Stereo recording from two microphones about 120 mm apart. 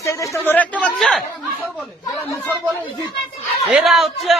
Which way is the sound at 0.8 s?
5° left (ahead or behind).